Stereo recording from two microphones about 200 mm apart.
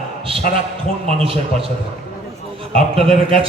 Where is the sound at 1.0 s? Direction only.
30° right (ahead or behind).